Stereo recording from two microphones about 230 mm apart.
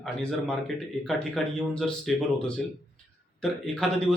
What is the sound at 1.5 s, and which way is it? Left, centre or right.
Speech, centre.